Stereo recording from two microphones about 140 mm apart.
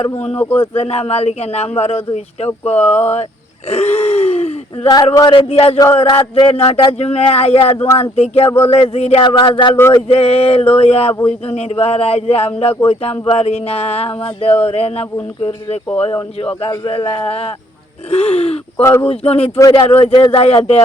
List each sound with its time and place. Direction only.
0.3 s speech: 10° left (ahead or behind)
0.7 s speech: 45° left (ahead or behind)
3.7 s groan: 50° left (ahead or behind)
5.1 s speech: 35° left (ahead or behind)
18.8 s speech: 20° left (ahead or behind)
19.0 s speech: 45° left (ahead or behind)
19.5 s speech: 25° left (ahead or behind)
19.9 s speech: 45° left (ahead or behind)